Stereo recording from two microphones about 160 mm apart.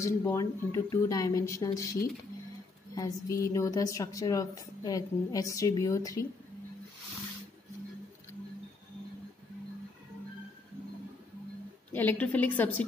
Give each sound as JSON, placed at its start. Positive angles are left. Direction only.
{"t": 0.0, "sound": "a woman's voice", "side_deg": 20}
{"t": 2.9, "sound": "a woman's voice", "side_deg": 20}
{"t": 11.9, "sound": "a woman's voice", "side_deg": 10}